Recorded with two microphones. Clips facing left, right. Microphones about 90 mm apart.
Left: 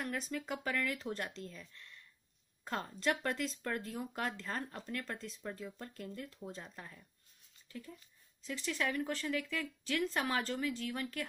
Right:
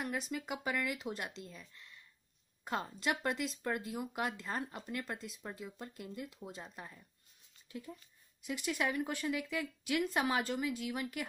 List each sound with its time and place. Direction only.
0.0 s speech: 10° right (ahead or behind)